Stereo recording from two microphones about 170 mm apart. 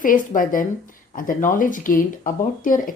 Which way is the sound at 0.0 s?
55° left (ahead or behind).